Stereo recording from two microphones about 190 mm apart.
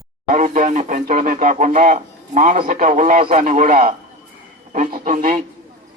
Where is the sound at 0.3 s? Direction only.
45° right (ahead or behind).